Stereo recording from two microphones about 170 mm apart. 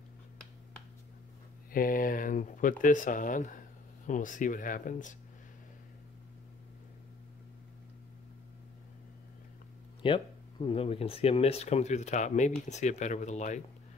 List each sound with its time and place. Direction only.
1.7 s speech: 55° left (ahead or behind)
10.0 s speech: 30° left (ahead or behind)